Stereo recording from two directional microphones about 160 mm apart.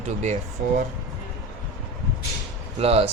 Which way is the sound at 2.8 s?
40° right (ahead or behind).